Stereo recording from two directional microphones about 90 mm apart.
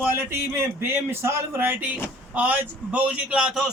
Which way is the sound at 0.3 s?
30° right (ahead or behind).